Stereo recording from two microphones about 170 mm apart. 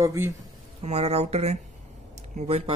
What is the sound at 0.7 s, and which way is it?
Speech, 40° right (ahead or behind).